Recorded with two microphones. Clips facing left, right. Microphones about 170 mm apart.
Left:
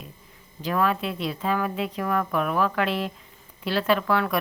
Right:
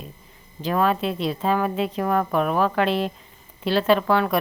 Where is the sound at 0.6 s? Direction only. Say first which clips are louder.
Right 3 dB; 25° right (ahead or behind).